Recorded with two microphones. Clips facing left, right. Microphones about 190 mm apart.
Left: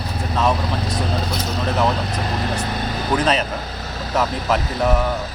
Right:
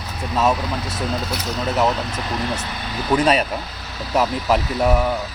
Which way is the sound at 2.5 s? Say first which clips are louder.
Left 6 dB; 45° left (ahead or behind).